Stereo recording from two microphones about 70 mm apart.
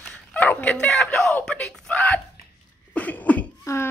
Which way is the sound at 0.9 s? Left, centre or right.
Centre.